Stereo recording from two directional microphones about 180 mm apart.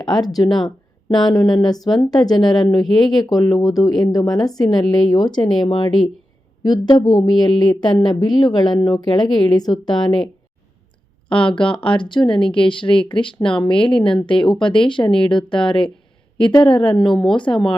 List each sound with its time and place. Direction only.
0.4 s a woman's voice: centre (ahead or behind)
1.1 s speech: 20° left (ahead or behind)
2.3 s a woman's voice: centre (ahead or behind)
3.2 s speech: 20° left (ahead or behind)
4.6 s a woman's voice: centre (ahead or behind)
4.9 s speech: 25° left (ahead or behind)
11.3 s speech: 30° left (ahead or behind)
17.1 s a woman's voice: centre (ahead or behind)
17.3 s speech: 25° left (ahead or behind)